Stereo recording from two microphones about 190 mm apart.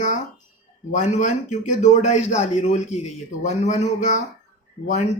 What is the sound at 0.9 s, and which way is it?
A man's voice, 35° left (ahead or behind).